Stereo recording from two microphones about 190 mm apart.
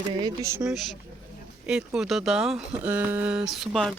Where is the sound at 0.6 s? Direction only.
Centre (ahead or behind).